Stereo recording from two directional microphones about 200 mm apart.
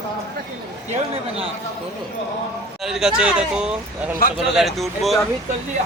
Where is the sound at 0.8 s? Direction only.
30° right (ahead or behind).